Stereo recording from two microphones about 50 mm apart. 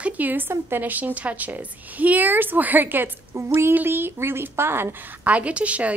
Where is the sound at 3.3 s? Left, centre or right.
Right.